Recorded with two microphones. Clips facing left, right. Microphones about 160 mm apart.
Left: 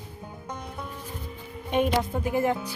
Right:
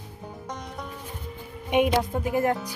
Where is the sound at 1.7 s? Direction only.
15° right (ahead or behind).